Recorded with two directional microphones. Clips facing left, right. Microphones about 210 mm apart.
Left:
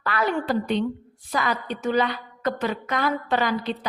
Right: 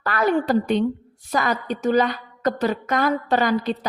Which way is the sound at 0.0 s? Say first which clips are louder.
Right 4 dB; 45° right (ahead or behind).